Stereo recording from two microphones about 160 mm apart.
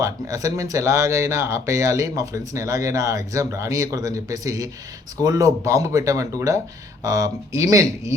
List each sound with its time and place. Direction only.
0.0 s speech: 20° right (ahead or behind)